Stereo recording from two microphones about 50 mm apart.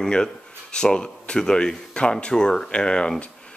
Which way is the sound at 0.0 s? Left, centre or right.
Centre.